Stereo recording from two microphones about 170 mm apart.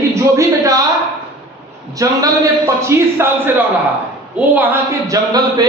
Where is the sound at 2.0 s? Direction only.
20° right (ahead or behind).